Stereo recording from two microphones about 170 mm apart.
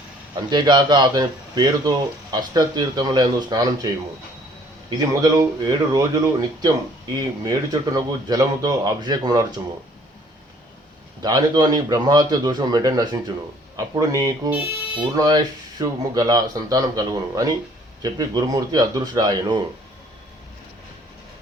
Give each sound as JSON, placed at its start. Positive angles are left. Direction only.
{"t": 0.5, "sound": "speech", "side_deg": -25}
{"t": 4.9, "sound": "speech", "side_deg": -20}
{"t": 11.2, "sound": "speech", "side_deg": -25}